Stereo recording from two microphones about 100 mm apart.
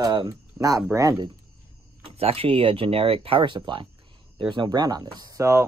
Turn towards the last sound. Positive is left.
turn(degrees=-30)  # may be behind; listen again after turning